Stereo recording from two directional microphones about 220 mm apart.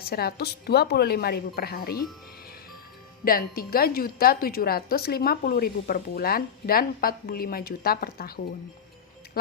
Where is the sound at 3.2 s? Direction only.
40° left (ahead or behind).